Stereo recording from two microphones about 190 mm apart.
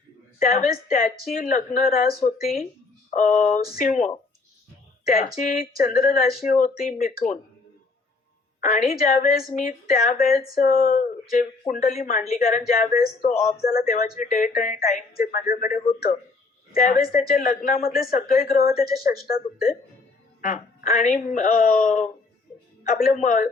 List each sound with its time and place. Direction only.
0.3 s speech: 45° left (ahead or behind)
8.6 s speech: 45° left (ahead or behind)
20.4 s speech: 45° left (ahead or behind)